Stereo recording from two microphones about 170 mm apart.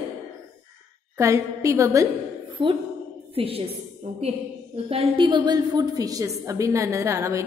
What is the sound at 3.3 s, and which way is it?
A woman's voice, 35° right (ahead or behind).